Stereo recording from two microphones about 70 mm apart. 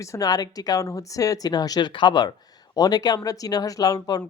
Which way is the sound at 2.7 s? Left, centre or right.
Left.